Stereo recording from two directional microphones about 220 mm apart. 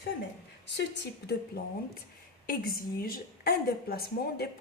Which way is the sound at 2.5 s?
40° left (ahead or behind).